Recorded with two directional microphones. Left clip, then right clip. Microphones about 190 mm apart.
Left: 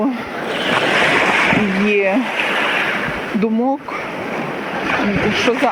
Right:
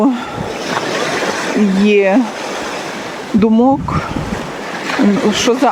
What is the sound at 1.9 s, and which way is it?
Speech, 30° right (ahead or behind).